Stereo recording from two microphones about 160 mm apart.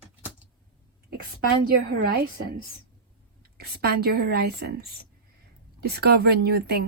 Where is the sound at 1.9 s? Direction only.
70° right (ahead or behind).